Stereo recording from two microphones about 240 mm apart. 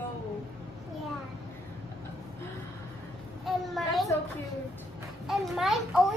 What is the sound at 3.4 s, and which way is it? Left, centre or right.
Speech, centre.